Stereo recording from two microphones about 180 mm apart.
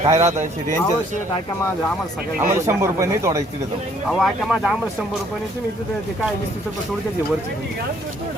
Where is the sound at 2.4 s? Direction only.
15° right (ahead or behind).